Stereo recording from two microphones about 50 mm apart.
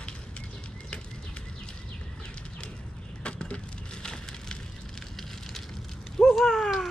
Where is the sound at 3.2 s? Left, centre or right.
Left.